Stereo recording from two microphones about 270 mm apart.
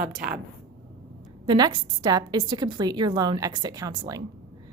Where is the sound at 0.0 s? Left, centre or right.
Centre.